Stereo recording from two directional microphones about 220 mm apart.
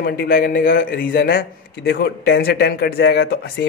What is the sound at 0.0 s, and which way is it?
A man's voice, 45° left (ahead or behind).